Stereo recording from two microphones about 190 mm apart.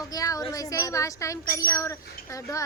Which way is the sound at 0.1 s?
20° left (ahead or behind).